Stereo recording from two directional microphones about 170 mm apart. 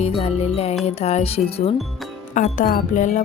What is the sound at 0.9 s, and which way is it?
Speech, 40° left (ahead or behind).